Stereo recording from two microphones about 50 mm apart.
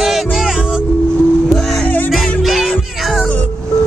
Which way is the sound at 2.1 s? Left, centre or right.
Centre.